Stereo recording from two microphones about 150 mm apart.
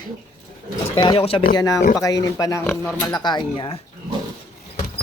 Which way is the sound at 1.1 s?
40° left (ahead or behind).